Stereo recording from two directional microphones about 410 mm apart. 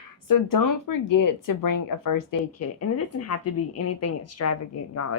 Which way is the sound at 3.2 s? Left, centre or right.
Left.